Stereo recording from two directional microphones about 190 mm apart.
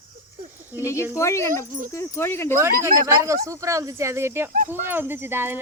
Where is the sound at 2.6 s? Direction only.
15° right (ahead or behind).